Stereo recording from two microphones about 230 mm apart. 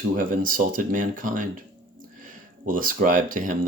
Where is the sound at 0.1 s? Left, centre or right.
Right.